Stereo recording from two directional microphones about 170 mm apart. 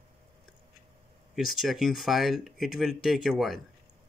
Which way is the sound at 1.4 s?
Centre (ahead or behind).